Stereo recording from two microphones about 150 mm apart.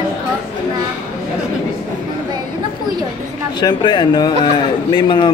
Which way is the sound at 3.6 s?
30° left (ahead or behind).